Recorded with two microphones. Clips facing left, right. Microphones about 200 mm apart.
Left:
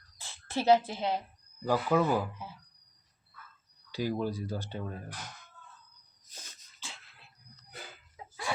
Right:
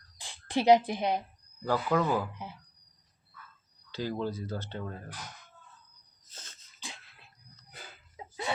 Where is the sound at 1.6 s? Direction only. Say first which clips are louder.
Left 1 dB; 10° left (ahead or behind).